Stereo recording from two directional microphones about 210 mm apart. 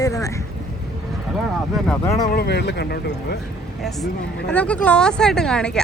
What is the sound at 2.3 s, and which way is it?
Speech, 50° left (ahead or behind).